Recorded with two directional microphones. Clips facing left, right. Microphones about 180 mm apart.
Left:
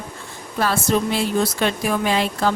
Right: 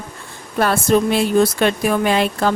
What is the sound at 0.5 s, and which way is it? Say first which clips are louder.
Speech: right 4 dB; 55° right (ahead or behind).